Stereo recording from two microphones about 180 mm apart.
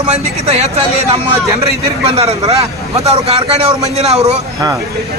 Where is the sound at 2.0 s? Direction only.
35° right (ahead or behind).